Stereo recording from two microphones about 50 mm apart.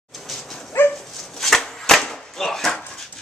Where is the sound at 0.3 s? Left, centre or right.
Centre.